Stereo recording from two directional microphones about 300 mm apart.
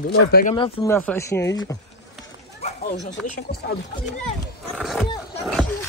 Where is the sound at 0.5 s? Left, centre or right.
Centre.